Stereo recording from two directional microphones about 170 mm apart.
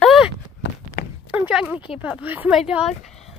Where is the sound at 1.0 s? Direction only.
60° left (ahead or behind).